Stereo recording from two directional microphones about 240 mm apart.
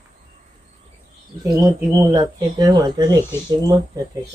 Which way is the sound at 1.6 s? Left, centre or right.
Centre.